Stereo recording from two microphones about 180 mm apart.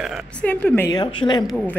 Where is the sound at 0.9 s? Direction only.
25° left (ahead or behind).